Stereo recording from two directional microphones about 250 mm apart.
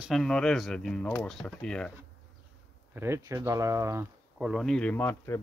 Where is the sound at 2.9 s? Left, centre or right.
Centre.